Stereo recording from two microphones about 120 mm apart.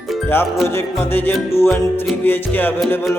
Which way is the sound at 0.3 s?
20° left (ahead or behind).